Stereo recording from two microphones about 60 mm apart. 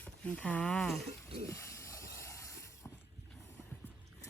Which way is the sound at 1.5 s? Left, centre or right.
Left.